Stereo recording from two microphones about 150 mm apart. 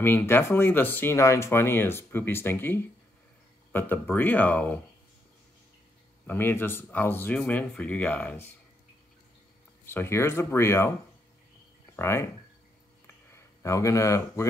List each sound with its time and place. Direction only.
0.0 s speech: 15° left (ahead or behind)
6.2 s speech: 15° left (ahead or behind)
9.8 s speech: 15° left (ahead or behind)
11.9 s speech: 15° left (ahead or behind)
13.0 s a sound: 15° left (ahead or behind)